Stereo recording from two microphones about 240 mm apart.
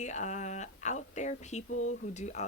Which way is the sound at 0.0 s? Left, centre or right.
Left.